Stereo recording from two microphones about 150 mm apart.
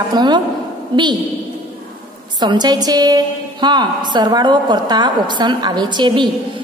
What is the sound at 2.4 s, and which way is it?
A woman's voice, 30° right (ahead or behind).